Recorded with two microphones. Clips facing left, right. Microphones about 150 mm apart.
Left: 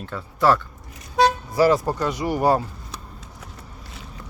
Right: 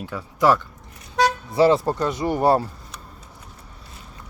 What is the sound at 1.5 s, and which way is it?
Speech, 25° right (ahead or behind).